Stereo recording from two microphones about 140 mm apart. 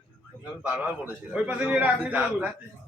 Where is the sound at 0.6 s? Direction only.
10° right (ahead or behind).